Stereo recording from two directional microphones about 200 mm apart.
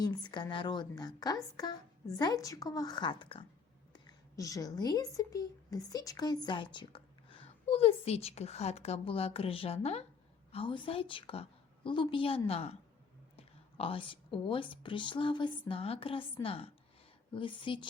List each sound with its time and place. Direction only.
0.0 s speech: 20° left (ahead or behind)